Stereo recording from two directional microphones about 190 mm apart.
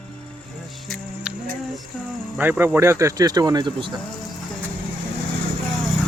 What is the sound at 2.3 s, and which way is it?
Speech, 10° right (ahead or behind).